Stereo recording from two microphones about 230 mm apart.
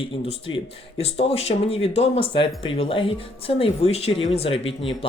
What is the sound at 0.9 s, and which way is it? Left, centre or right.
Speech, left.